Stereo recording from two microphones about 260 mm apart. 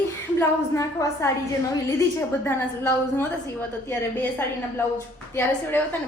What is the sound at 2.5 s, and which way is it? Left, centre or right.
A woman's voice, centre.